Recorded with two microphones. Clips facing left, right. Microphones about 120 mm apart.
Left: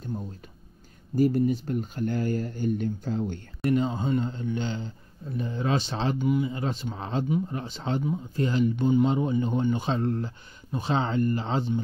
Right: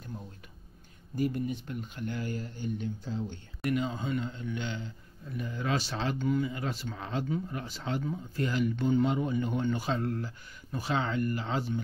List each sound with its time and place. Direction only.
1.1 s speech: 40° left (ahead or behind)
3.6 s a man's voice: 30° left (ahead or behind)
6.1 s speech: 10° left (ahead or behind)
6.4 s speech: 25° left (ahead or behind)